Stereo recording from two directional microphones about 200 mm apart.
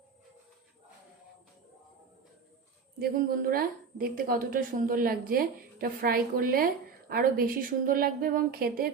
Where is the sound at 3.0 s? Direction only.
45° right (ahead or behind).